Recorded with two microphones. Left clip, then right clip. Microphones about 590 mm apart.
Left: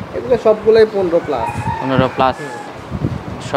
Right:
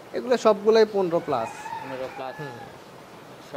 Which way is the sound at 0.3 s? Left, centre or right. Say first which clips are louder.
Left 8 dB; right.